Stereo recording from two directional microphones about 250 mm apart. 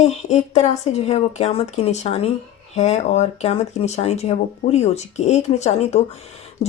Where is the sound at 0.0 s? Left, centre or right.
Left.